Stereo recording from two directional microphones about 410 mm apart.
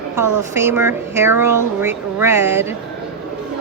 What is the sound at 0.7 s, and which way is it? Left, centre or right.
Speech, centre.